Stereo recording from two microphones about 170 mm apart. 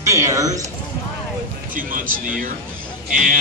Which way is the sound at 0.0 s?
20° right (ahead or behind).